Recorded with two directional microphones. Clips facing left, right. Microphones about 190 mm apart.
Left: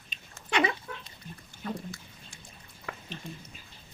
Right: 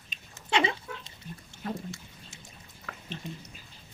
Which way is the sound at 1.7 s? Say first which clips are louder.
Even; 25° right (ahead or behind).